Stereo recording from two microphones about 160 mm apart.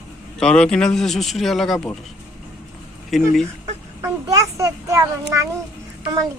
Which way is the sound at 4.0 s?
20° right (ahead or behind).